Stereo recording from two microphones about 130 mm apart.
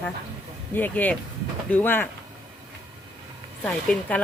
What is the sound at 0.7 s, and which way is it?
Speech, 15° left (ahead or behind).